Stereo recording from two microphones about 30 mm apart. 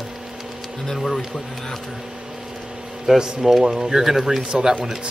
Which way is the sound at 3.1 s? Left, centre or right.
Right.